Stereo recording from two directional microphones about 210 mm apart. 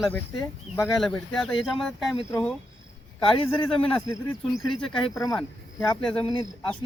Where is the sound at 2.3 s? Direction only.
15° left (ahead or behind).